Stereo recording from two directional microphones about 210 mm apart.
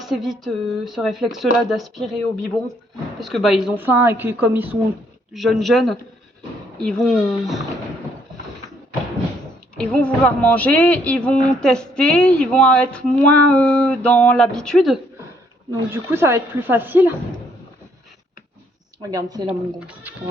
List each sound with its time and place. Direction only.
0.0 s a woman's voice: centre (ahead or behind)
9.7 s speech: 5° left (ahead or behind)
15.9 s a woman's voice: 10° right (ahead or behind)
19.0 s a woman's voice: 15° right (ahead or behind)
19.5 s speech: 5° right (ahead or behind)